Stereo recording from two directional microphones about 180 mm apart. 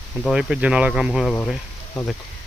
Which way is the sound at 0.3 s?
5° right (ahead or behind).